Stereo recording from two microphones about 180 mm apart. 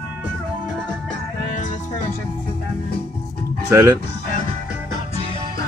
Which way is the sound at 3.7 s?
15° right (ahead or behind).